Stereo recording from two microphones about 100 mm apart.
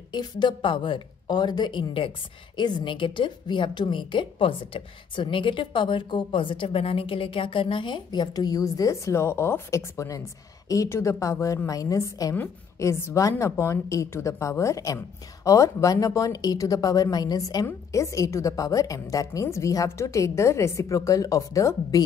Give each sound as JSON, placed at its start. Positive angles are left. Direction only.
{"t": 0.1, "sound": "a woman's voice", "side_deg": 45}